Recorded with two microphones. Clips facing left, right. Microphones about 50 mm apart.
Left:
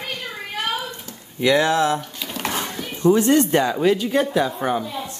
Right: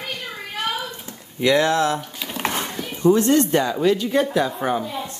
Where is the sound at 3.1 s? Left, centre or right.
Centre.